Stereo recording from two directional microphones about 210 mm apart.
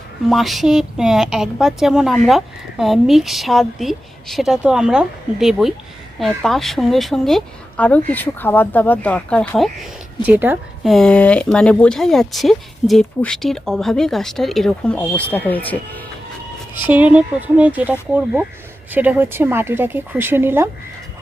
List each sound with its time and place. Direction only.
0.3 s a woman's voice: centre (ahead or behind)
10.9 s a woman's voice: 5° left (ahead or behind)
16.8 s a woman's voice: 5° right (ahead or behind)